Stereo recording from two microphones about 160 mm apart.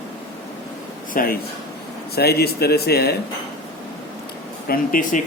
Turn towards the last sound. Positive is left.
turn(degrees=60)  # may be behind; listen again after turning